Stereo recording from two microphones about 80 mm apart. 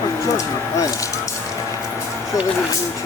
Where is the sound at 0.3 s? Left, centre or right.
Left.